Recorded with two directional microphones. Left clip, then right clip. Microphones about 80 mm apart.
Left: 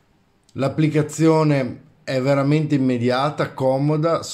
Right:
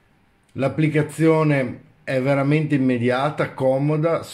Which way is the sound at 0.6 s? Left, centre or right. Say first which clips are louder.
Even; left.